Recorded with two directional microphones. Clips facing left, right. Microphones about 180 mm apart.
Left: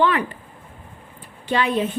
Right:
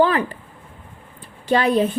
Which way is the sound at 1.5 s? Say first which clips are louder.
Right 4 dB; 40° right (ahead or behind).